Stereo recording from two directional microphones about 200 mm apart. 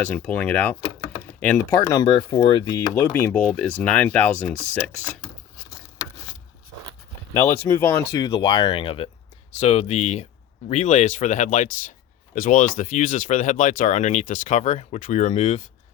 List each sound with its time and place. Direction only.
0.1 s speech: 5° left (ahead or behind)
1.7 s speech: 20° left (ahead or behind)
7.3 s speech: 15° left (ahead or behind); by 15.6 s 35° left (ahead or behind)